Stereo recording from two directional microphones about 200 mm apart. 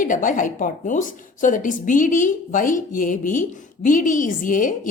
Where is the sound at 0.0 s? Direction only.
40° left (ahead or behind).